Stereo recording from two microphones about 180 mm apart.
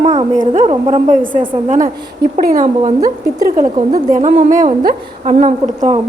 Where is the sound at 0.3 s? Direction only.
40° right (ahead or behind).